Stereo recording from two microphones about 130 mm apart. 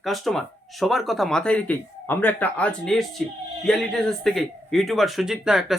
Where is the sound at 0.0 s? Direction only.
Centre (ahead or behind).